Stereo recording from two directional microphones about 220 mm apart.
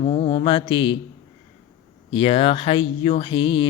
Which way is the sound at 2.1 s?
25° left (ahead or behind).